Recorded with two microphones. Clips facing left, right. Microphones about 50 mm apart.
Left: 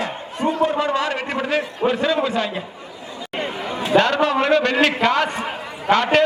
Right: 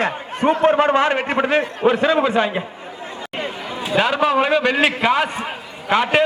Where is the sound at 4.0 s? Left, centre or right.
Centre.